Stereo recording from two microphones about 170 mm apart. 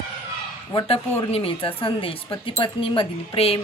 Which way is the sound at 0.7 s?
25° left (ahead or behind).